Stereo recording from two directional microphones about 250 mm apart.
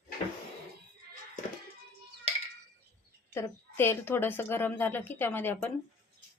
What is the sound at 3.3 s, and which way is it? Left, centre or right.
A woman's voice, centre.